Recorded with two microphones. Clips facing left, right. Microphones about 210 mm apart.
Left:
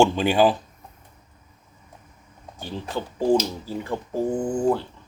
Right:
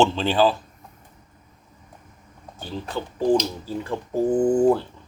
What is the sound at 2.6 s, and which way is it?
Speech, 10° left (ahead or behind).